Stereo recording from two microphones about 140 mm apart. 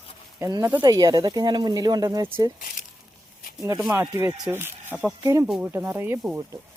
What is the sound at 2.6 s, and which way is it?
Speech, 90° left.